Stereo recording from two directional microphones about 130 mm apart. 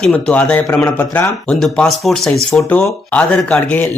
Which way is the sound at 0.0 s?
10° left (ahead or behind).